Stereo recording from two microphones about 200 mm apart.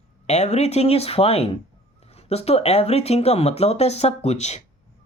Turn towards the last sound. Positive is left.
turn(degrees=35)  # may be behind; listen again after turning